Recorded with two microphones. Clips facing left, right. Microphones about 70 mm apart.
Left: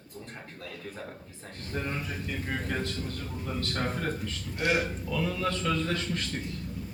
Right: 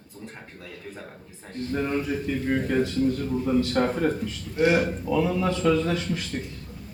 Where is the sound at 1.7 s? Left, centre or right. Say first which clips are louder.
Right 8 dB; centre.